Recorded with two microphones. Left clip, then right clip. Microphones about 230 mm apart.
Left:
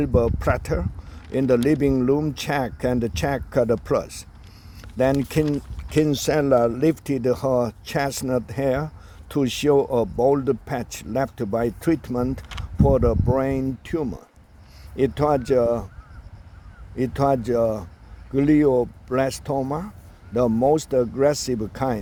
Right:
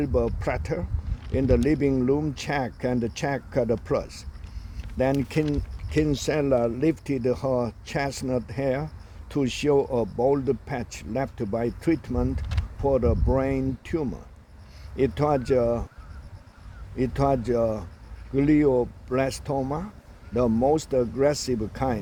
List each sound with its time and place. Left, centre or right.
0.0 s speech: left
17.0 s speech: left